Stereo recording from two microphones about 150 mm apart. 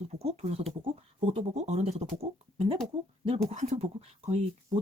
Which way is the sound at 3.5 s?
50° right (ahead or behind).